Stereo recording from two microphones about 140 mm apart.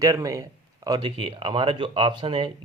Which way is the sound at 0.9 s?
35° right (ahead or behind).